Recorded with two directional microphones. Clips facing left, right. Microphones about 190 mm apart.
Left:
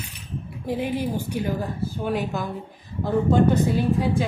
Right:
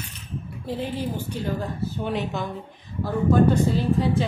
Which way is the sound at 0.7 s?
15° left (ahead or behind).